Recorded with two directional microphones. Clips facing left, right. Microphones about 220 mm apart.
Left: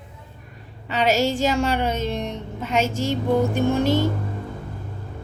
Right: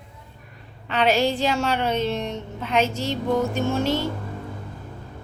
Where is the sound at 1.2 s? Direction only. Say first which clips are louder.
Left 1 dB; 45° left (ahead or behind).